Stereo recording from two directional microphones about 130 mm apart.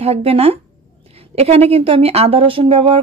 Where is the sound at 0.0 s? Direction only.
50° right (ahead or behind).